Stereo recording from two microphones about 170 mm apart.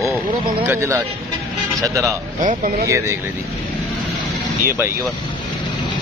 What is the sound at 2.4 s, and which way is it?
Speech, 55° right (ahead or behind).